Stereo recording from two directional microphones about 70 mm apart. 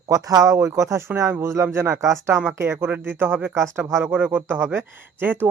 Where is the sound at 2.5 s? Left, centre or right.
Right.